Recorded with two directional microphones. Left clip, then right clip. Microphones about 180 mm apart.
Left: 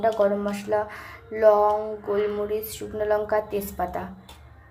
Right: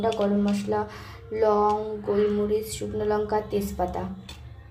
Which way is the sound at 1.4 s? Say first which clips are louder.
Left 4 dB; 5° left (ahead or behind).